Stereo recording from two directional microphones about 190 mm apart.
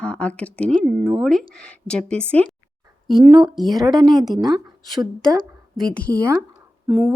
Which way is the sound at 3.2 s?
25° right (ahead or behind).